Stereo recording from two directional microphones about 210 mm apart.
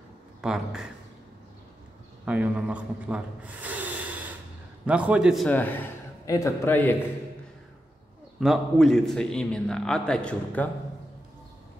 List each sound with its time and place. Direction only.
0.4 s a man's voice: 5° right (ahead or behind)
2.2 s a man's voice: 5° right (ahead or behind); by 7.0 s 10° left (ahead or behind)
8.4 s a man's voice: centre (ahead or behind)